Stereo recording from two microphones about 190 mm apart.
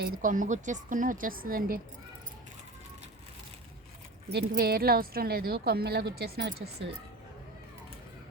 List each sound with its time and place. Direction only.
0.0 s a woman's voice: 45° right (ahead or behind)
4.3 s a woman's voice: 55° right (ahead or behind)